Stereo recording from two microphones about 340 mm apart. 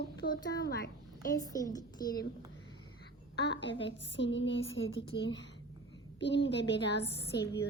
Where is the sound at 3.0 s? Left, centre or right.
Left.